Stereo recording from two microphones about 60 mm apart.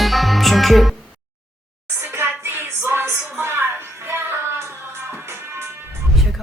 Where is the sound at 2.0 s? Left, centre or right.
Right.